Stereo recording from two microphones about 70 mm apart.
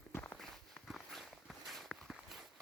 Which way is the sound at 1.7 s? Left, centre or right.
Centre.